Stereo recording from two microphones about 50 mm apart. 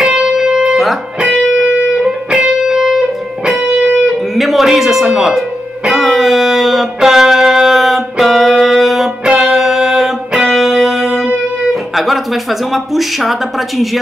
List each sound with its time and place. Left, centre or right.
0.0 s music: centre
4.4 s speech: centre
5.9 s music: centre
12.7 s speech: centre